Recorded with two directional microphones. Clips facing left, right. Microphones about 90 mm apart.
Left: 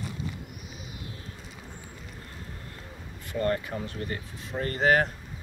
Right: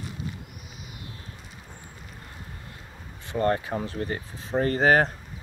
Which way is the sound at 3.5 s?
25° right (ahead or behind).